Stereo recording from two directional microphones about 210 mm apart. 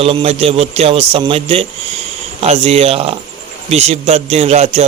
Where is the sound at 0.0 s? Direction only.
25° right (ahead or behind).